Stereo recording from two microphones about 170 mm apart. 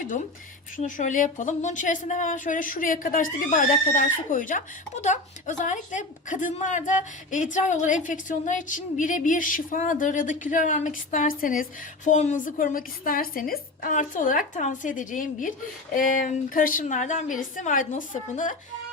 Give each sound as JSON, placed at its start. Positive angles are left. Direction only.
{"t": 0.8, "sound": "speech", "side_deg": 50}